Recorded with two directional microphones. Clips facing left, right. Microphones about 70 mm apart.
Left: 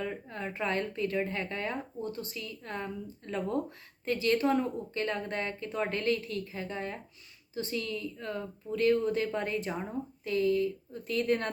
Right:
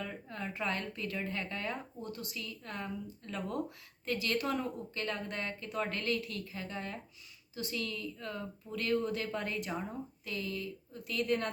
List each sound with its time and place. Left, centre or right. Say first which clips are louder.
0.0 s speech: left 4 dB; left